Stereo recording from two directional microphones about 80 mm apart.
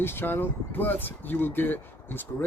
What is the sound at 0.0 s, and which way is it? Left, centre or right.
Speech, left.